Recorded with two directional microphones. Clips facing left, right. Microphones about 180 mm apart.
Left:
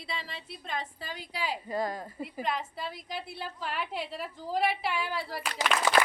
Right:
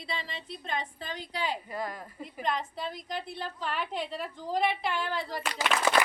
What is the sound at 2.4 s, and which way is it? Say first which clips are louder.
A woman's voice: right 3 dB; 5° left (ahead or behind).